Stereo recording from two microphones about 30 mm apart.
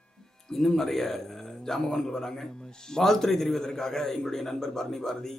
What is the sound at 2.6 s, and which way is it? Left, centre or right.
Speech, left.